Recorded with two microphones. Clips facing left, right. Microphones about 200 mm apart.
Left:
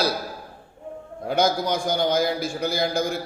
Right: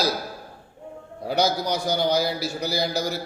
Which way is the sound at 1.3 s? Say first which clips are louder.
Left 1 dB; 50° left (ahead or behind).